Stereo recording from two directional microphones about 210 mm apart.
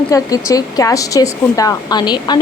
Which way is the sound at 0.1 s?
15° left (ahead or behind).